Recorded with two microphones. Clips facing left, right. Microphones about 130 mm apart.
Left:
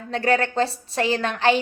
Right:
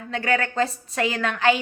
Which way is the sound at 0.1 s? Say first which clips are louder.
Left 3 dB; 35° left (ahead or behind).